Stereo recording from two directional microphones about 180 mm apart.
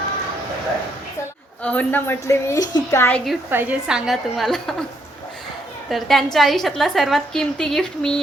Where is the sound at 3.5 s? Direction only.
10° right (ahead or behind).